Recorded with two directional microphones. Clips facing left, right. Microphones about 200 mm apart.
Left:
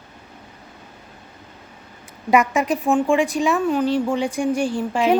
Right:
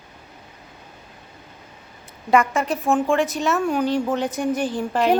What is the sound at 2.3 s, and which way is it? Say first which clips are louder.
Speech: left 1 dB; 15° left (ahead or behind).